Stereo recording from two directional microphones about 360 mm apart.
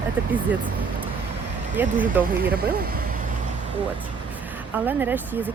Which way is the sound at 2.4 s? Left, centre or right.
Right.